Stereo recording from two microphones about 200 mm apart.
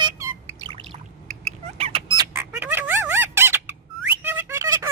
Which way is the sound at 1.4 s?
30° right (ahead or behind).